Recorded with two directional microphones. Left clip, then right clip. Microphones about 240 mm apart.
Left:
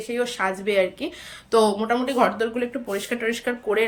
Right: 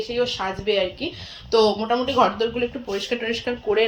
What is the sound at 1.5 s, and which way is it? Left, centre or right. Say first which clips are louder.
Speech: right 1 dB; left.